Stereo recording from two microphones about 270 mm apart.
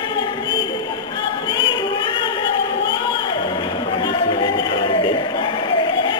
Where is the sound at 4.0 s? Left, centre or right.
Centre.